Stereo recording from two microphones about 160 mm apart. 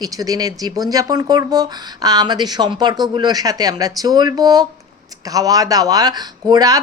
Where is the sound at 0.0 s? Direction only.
25° right (ahead or behind).